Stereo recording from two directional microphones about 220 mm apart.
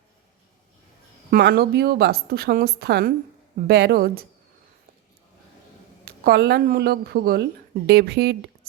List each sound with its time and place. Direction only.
1.3 s a woman's voice: 45° right (ahead or behind)
6.1 s a woman's voice: 45° right (ahead or behind)